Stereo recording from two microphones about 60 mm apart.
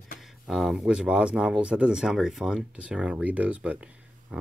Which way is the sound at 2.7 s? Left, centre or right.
Centre.